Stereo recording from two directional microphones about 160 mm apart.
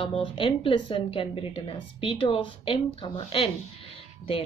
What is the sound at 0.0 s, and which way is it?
A woman's voice, 30° left (ahead or behind).